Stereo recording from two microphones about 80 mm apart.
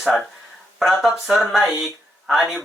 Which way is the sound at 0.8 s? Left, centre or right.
Centre.